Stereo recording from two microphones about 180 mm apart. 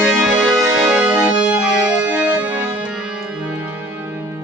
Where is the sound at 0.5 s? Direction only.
20° right (ahead or behind).